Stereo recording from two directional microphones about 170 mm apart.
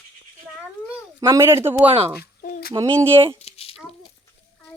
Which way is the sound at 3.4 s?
35° left (ahead or behind).